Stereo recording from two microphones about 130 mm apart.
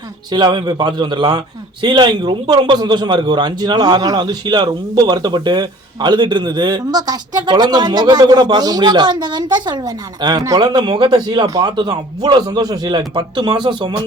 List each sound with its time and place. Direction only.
0.3 s speech: 35° right (ahead or behind)